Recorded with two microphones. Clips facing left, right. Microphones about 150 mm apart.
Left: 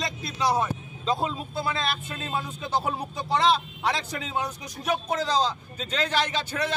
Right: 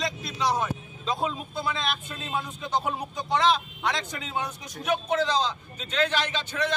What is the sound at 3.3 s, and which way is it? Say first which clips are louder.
A man's voice: left 1 dB; 35° left (ahead or behind).